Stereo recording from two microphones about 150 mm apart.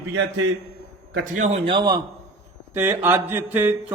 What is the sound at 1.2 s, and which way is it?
Speech, 60° right (ahead or behind).